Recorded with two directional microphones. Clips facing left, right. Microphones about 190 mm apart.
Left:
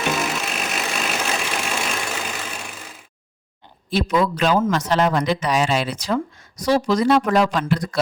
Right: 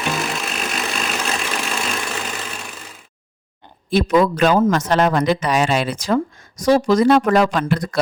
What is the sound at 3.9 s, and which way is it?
A man's voice, 50° right (ahead or behind).